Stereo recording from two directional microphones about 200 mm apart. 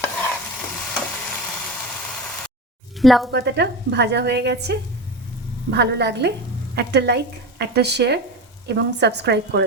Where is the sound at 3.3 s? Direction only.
55° right (ahead or behind).